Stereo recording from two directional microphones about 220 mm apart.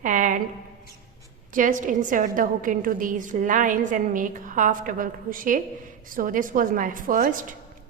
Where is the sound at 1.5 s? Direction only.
35° right (ahead or behind).